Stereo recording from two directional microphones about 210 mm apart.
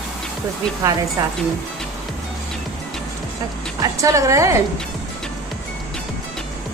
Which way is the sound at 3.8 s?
15° right (ahead or behind).